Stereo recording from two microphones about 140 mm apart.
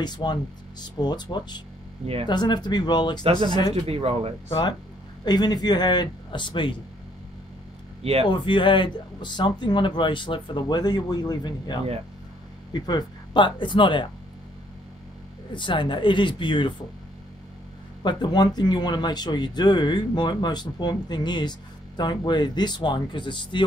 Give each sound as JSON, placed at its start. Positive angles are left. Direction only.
{"t": 0.0, "sound": "speech", "side_deg": 30}
{"t": 3.3, "sound": "speech", "side_deg": -40}
{"t": 4.5, "sound": "speech", "side_deg": 40}
{"t": 8.0, "sound": "speech", "side_deg": -45}
{"t": 8.3, "sound": "speech", "side_deg": 35}
{"t": 15.5, "sound": "speech", "side_deg": 35}
{"t": 18.0, "sound": "speech", "side_deg": 30}